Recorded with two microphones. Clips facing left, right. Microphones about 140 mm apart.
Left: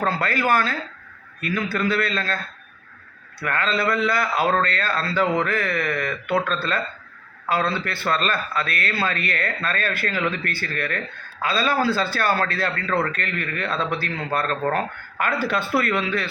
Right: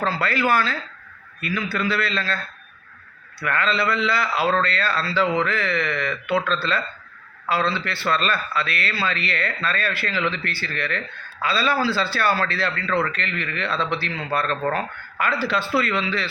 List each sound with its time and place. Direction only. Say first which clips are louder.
0.0 s a man's voice: even; 50° left (ahead or behind)
3.4 s a man's voice: even; 45° left (ahead or behind)